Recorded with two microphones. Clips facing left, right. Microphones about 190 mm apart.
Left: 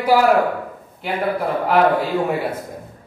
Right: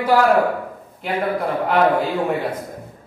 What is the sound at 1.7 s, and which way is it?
Speech, 5° left (ahead or behind).